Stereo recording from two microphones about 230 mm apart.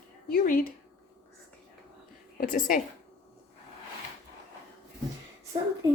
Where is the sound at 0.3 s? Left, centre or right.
Left.